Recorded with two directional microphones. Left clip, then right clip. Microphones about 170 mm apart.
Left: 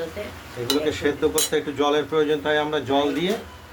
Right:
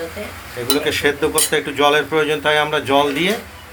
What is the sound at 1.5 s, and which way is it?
Speech, 10° right (ahead or behind).